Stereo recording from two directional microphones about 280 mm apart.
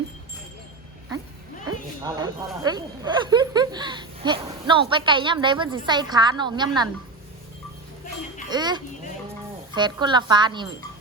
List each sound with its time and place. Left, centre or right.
1.6 s a sound: centre
2.6 s speech: centre
8.4 s a woman's voice: centre